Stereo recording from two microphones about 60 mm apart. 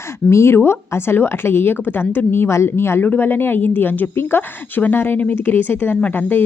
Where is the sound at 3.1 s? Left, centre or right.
Left.